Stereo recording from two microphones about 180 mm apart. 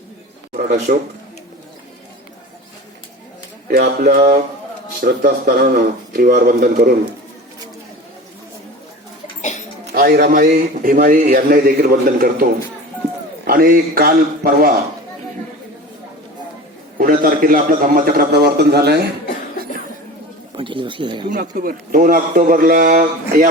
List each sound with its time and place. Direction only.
0.5 s speech: 40° right (ahead or behind)
3.7 s a man's voice: 55° right (ahead or behind)
9.4 s a sound: 40° left (ahead or behind)
9.9 s a man's voice: 60° right (ahead or behind)
13.5 s a man's voice: 50° right (ahead or behind)
17.0 s a man's voice: 50° right (ahead or behind)
20.6 s speech: 25° right (ahead or behind)
21.2 s a man's voice: 50° right (ahead or behind)